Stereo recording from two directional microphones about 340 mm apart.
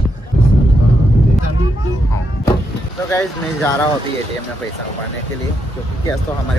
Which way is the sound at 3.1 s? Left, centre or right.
Centre.